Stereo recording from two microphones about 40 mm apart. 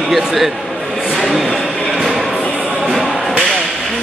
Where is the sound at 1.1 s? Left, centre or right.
Centre.